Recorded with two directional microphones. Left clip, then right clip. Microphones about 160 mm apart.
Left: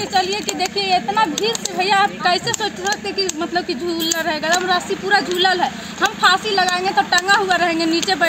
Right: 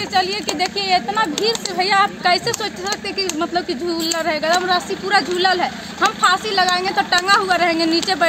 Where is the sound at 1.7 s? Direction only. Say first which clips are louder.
Left 1 dB; 35° right (ahead or behind).